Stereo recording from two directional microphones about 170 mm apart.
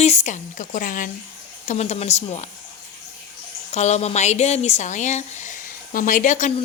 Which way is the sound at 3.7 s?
40° left (ahead or behind).